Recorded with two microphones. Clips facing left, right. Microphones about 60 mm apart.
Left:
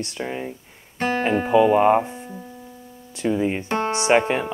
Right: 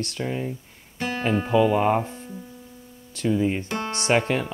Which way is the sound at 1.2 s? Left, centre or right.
Left.